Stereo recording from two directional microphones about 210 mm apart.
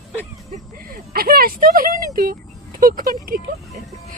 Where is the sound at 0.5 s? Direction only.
45° right (ahead or behind).